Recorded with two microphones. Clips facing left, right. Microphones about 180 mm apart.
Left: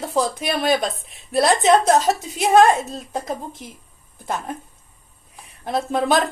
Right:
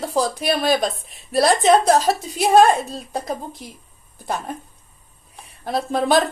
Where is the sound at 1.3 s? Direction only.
Centre (ahead or behind).